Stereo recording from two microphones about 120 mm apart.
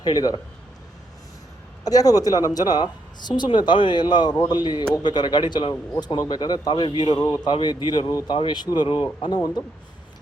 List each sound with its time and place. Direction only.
0.0 s a woman's voice: 35° left (ahead or behind)
1.8 s a woman's voice: 30° left (ahead or behind)